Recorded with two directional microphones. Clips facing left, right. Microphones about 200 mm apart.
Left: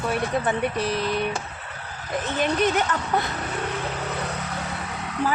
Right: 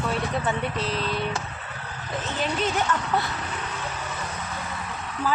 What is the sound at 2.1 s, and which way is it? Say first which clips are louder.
Speech: left 4 dB; 15° left (ahead or behind).